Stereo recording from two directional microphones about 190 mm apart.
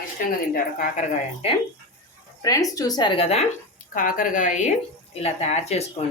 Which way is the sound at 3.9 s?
45° left (ahead or behind).